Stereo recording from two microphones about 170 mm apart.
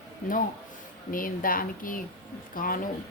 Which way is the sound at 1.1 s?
55° left (ahead or behind).